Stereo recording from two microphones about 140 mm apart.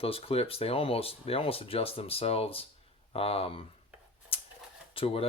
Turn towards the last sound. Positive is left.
turn(degrees=40)  # may be behind; listen again after turning